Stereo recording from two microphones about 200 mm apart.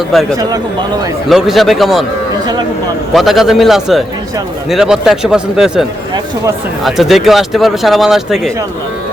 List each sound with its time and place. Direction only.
0.1 s speech: centre (ahead or behind)
0.3 s speech: 20° right (ahead or behind)
1.3 s speech: centre (ahead or behind)
3.1 s speech: centre (ahead or behind)
6.8 s speech: centre (ahead or behind)